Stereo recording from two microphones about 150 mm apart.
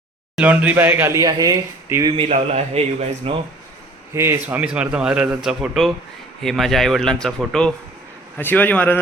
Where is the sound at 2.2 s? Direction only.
45° right (ahead or behind).